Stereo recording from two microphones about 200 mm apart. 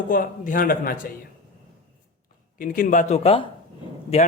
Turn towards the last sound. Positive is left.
turn(degrees=30)  # may be behind; listen again after turning